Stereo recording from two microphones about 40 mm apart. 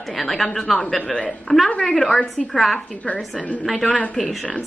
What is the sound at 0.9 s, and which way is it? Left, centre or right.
Speech, left.